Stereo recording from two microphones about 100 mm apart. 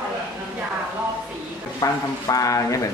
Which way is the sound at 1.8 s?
35° left (ahead or behind).